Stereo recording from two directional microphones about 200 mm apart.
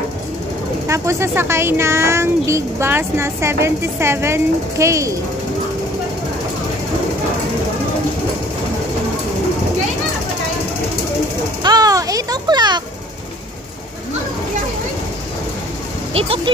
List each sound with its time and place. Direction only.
0.8 s speech: 15° right (ahead or behind)
11.6 s a sound: 20° right (ahead or behind)
16.1 s speech: 30° right (ahead or behind)